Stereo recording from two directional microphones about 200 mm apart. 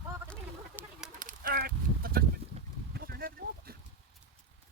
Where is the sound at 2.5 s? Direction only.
30° right (ahead or behind).